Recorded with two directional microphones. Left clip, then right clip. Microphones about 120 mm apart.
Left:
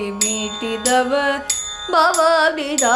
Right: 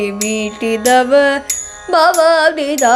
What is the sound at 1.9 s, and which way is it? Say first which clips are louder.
Music: right 4 dB; 45° right (ahead or behind).